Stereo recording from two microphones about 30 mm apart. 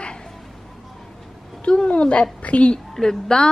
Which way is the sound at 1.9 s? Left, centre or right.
Left.